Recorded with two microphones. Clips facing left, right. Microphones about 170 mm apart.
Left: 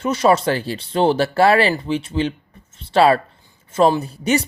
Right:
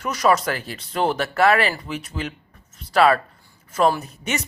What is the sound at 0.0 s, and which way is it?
Speech, 25° left (ahead or behind).